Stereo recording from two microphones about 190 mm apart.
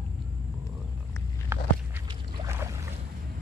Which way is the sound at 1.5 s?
15° right (ahead or behind).